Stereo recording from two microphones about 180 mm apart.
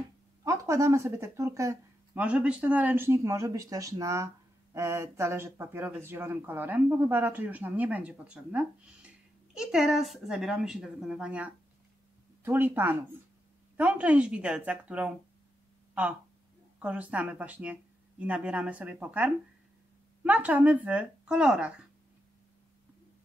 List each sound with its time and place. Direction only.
0.4 s speech: 15° right (ahead or behind)
2.2 s speech: 5° right (ahead or behind)